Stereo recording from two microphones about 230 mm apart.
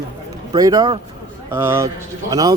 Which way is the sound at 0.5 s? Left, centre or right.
Centre.